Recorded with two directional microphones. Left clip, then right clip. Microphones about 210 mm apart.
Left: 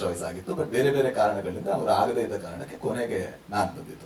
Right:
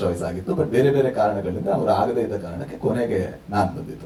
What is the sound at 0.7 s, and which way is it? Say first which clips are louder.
Speech: right 4 dB; 5° right (ahead or behind).